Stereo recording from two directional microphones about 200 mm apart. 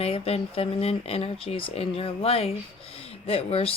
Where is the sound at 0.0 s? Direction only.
30° left (ahead or behind).